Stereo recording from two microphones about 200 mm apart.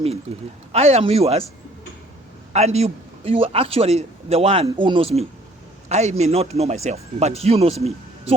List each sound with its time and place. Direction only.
0.7 s speech: 30° right (ahead or behind)
2.5 s a man's voice: 35° right (ahead or behind)